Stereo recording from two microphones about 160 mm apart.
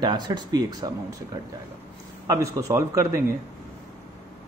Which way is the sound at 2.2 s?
20° right (ahead or behind).